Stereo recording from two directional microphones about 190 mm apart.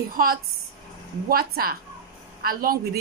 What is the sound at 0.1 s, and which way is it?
A woman's voice, 50° right (ahead or behind).